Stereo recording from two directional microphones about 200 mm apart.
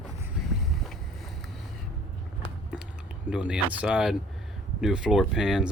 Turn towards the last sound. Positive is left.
turn(degrees=0)  # may be behind; listen again after turning